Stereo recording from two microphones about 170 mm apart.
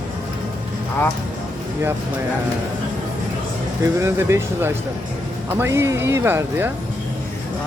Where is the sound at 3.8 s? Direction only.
15° right (ahead or behind).